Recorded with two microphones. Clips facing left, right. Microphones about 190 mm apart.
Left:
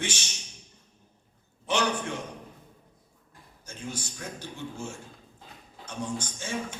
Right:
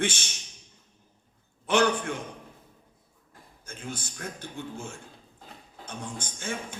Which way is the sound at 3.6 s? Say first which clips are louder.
Left 1 dB; 55° right (ahead or behind).